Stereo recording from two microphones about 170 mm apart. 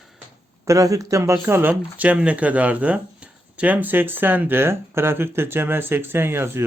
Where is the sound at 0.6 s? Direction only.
20° right (ahead or behind).